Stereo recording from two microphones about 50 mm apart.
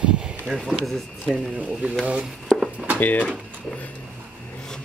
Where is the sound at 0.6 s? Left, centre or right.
Centre.